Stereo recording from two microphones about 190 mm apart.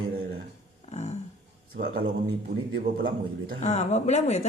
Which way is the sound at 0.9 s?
35° left (ahead or behind).